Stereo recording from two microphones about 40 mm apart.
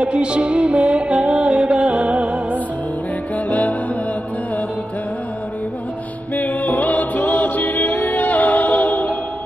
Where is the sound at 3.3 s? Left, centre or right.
Left.